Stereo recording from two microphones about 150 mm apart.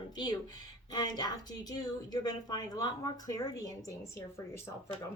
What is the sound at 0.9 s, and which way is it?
A woman's voice, 25° left (ahead or behind).